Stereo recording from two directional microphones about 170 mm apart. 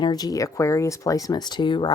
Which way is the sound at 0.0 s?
25° left (ahead or behind).